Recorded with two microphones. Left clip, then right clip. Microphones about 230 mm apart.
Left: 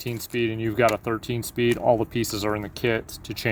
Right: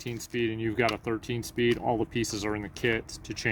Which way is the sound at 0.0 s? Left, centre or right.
Left.